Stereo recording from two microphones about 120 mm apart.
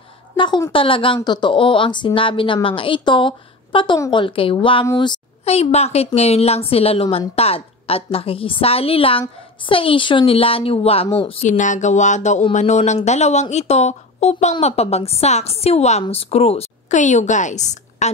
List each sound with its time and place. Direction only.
0.4 s a woman's voice: 40° left (ahead or behind)
5.4 s a woman's voice: 60° left (ahead or behind)
11.4 s a woman's voice: 90° left